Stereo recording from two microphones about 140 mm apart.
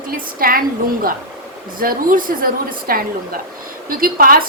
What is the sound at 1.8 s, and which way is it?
A woman's voice, 85° right.